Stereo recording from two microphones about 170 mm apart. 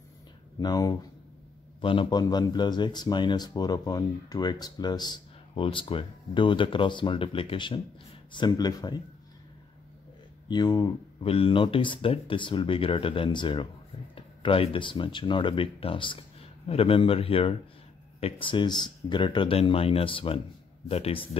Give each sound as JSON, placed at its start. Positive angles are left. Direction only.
{"t": 0.6, "sound": "speech", "side_deg": 25}
{"t": 10.5, "sound": "speech", "side_deg": 25}